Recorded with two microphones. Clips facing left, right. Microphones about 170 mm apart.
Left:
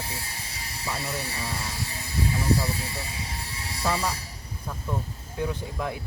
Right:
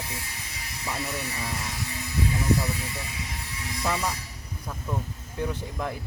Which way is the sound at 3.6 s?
30° left (ahead or behind).